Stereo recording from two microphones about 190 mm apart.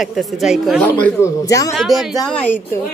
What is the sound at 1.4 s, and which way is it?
Speech, 15° left (ahead or behind).